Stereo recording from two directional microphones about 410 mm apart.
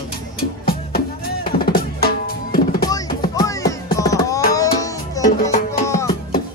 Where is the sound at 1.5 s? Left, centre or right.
Left.